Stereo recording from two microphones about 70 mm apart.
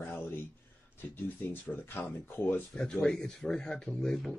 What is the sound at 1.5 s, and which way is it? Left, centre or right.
Speech, left.